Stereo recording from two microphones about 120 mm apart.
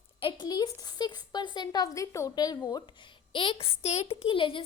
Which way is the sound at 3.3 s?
45° left (ahead or behind).